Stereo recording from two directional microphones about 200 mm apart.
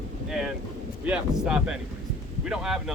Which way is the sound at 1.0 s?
5° right (ahead or behind).